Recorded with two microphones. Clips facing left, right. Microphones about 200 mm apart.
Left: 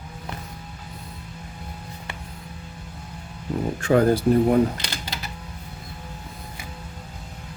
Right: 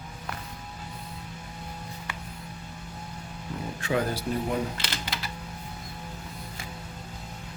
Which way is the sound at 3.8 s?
50° left (ahead or behind).